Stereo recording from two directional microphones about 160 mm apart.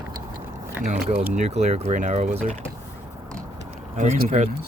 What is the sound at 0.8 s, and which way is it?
Speech, 45° right (ahead or behind).